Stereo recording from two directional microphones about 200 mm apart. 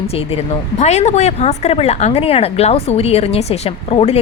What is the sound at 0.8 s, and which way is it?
A woman's voice, 35° left (ahead or behind).